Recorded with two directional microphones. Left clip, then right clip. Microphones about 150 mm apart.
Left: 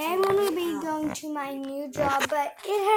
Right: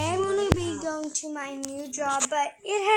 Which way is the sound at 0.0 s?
5° left (ahead or behind).